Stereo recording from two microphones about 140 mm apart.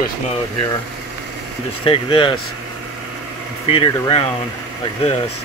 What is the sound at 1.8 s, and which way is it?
Speech, 40° left (ahead or behind).